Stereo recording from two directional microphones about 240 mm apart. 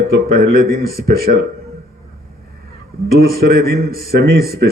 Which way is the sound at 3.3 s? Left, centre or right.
Right.